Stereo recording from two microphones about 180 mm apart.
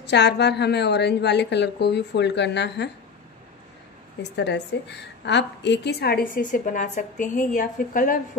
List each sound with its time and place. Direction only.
0.0 s a woman's voice: 70° left (ahead or behind)
4.2 s a woman's voice: 75° left (ahead or behind); by 8.2 s 50° left (ahead or behind)